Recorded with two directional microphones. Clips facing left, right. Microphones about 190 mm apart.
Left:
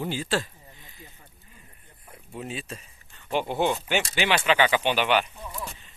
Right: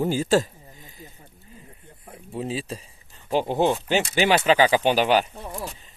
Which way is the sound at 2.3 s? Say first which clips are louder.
Right 6 dB; 30° right (ahead or behind).